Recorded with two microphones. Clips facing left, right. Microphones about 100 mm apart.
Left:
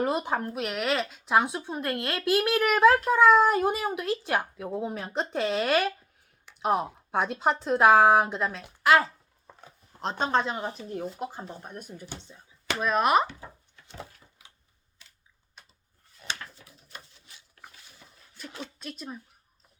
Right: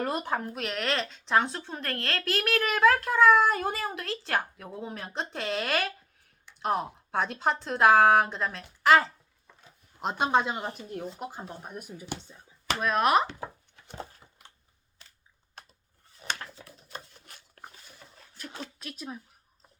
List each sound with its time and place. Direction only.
0.3 s a child's voice: centre (ahead or behind)
10.0 s speech: 10° right (ahead or behind)
10.8 s speech: centre (ahead or behind)
17.2 s a sound: 50° right (ahead or behind)
18.8 s speech: centre (ahead or behind)